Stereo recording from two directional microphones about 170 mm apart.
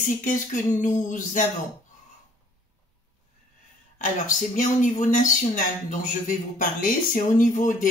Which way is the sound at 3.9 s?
50° left (ahead or behind).